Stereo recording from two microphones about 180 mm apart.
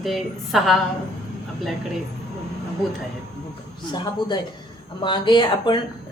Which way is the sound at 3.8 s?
25° left (ahead or behind).